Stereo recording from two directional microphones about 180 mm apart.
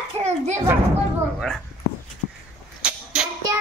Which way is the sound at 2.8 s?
5° right (ahead or behind).